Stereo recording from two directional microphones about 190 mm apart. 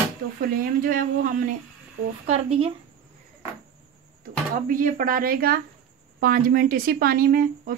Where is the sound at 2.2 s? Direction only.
30° right (ahead or behind).